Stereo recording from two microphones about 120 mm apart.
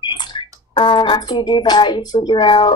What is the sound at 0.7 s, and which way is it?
Speech, 40° left (ahead or behind).